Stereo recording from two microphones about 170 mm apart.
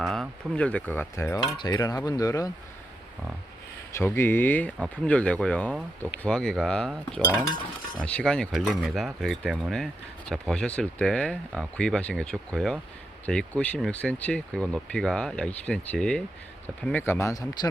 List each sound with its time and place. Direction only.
0.0 s speech: centre (ahead or behind); by 2.5 s 20° left (ahead or behind)
3.9 s speech: 15° left (ahead or behind)